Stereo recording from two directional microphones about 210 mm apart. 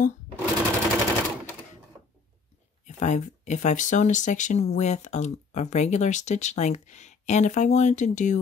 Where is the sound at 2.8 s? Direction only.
35° left (ahead or behind).